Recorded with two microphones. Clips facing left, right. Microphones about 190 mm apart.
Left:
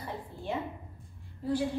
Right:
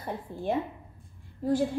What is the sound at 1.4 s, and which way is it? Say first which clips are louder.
Speech: right 4 dB; 45° right (ahead or behind).